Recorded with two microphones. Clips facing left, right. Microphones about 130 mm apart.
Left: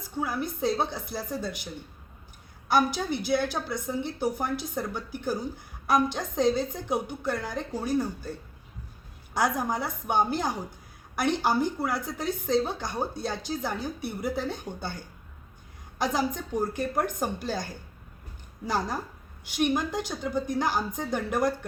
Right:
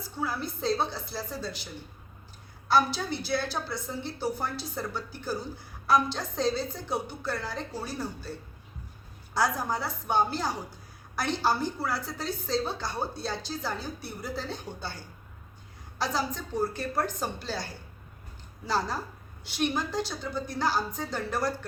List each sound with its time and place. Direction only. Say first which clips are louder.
0.2 s a woman's voice: left 3 dB; 15° left (ahead or behind)
2.6 s a woman's voice: left 1 dB; 15° left (ahead or behind)
9.3 s a woman's voice: left 1 dB; 20° left (ahead or behind)
16.1 s a woman's voice: left 1 dB; 15° left (ahead or behind)
18.7 s a woman's voice: even; 15° left (ahead or behind)